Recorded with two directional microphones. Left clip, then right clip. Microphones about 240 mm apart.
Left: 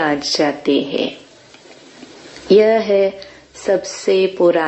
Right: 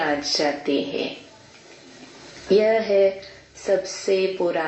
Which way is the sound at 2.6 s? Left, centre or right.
Left.